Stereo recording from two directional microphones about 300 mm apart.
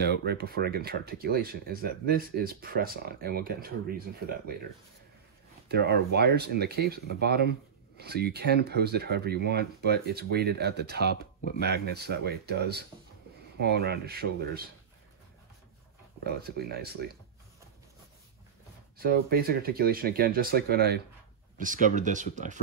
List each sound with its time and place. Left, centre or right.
0.0 s speech: right
5.7 s speech: right
16.3 s speech: right
18.9 s speech: right